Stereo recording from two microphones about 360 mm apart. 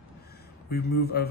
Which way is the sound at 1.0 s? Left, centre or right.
Left.